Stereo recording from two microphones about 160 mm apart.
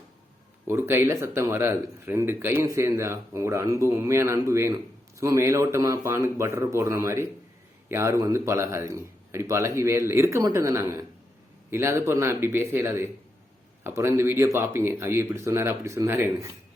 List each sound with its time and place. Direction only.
0.7 s speech: 15° right (ahead or behind)